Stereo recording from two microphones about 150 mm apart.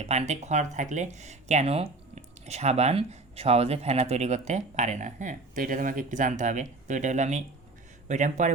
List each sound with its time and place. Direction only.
0.0 s speech: 45° right (ahead or behind)